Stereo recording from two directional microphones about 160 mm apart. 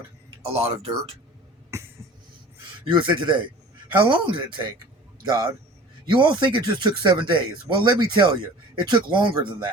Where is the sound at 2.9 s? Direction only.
30° right (ahead or behind).